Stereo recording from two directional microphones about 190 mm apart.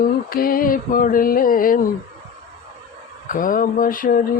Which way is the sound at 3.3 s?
45° left (ahead or behind).